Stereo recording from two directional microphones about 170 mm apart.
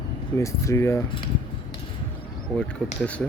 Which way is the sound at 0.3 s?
15° left (ahead or behind).